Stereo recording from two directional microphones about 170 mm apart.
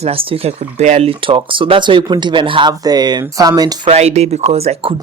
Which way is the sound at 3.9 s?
40° right (ahead or behind).